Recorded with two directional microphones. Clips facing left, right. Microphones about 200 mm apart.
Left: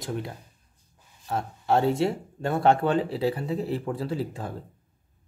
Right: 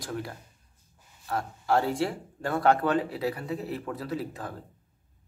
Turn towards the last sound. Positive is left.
turn(degrees=30)  # may be behind; listen again after turning